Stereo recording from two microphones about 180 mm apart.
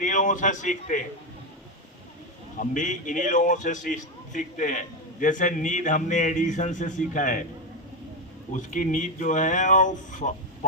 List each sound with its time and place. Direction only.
0.0 s a man's voice: 45° left (ahead or behind)
2.6 s a man's voice: 45° left (ahead or behind)
8.5 s a man's voice: 45° left (ahead or behind)